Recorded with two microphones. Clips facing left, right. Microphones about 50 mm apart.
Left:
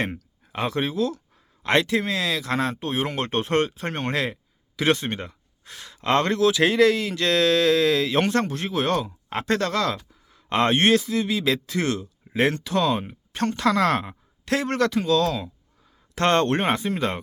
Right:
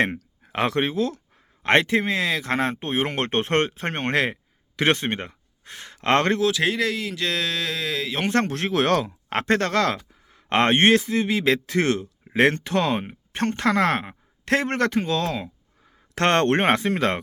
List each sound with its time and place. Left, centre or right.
0.0 s a sound: right
0.5 s speech: right
0.8 s a man's voice: right
6.0 s a man's voice: right
6.4 s speech: centre
8.3 s speech: right
9.5 s a man's voice: right
16.1 s speech: right